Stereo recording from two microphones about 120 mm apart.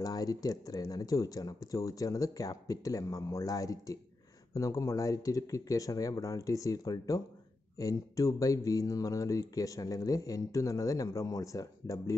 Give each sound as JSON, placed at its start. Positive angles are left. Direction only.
{"t": 0.0, "sound": "speech", "side_deg": 30}